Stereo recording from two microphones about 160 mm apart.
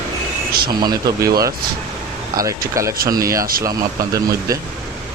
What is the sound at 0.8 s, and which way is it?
Speech, 25° right (ahead or behind).